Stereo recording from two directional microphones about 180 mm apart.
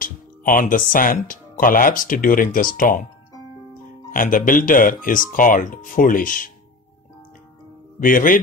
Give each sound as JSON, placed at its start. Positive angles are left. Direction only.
{"t": 0.0, "sound": "speech", "side_deg": 50}
{"t": 4.1, "sound": "speech", "side_deg": 50}
{"t": 8.0, "sound": "speech", "side_deg": 50}